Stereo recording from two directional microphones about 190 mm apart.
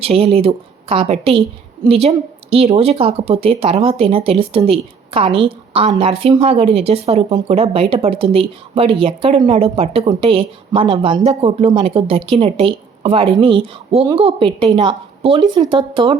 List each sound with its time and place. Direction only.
0.0 s speech: 30° right (ahead or behind)